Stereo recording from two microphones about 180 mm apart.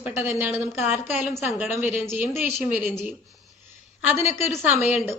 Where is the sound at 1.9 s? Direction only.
10° right (ahead or behind).